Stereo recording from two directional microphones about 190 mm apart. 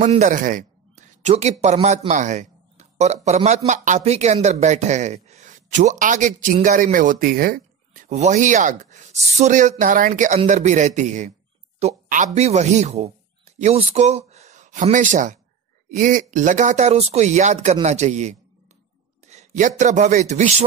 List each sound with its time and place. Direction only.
0.0 s speech: 40° right (ahead or behind)